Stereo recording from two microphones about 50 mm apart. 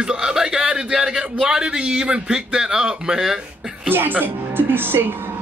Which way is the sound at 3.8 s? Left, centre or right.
Right.